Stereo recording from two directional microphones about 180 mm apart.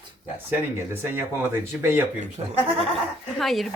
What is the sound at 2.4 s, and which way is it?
Speech, 30° right (ahead or behind).